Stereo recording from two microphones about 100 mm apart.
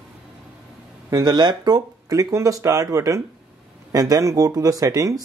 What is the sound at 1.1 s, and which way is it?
Speech, 45° right (ahead or behind).